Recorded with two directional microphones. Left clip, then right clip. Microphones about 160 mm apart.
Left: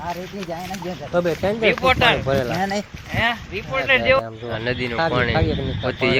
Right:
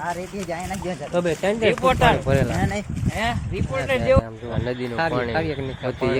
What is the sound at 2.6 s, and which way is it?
Speech, 50° left (ahead or behind).